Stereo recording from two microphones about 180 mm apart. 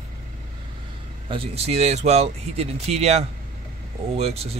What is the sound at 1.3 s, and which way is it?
Speech, 35° right (ahead or behind).